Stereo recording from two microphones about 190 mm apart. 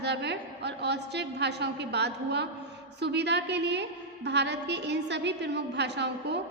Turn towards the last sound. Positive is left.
turn(degrees=-65)  # may be behind; listen again after turning